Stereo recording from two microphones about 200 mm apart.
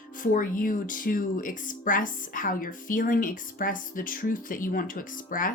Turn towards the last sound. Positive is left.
turn(degrees=45)  # may be behind; listen again after turning